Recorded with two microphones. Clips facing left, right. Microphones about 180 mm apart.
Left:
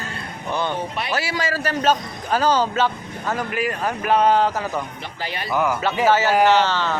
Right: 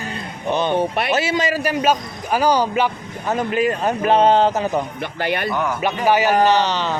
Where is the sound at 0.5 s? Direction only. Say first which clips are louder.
Right 6 dB; 20° right (ahead or behind).